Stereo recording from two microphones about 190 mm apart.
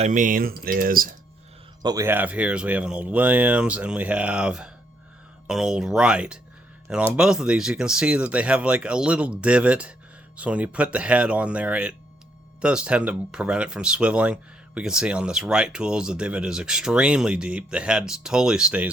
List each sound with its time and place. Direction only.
0.0 s speech: 40° right (ahead or behind)
1.8 s speech: 20° right (ahead or behind)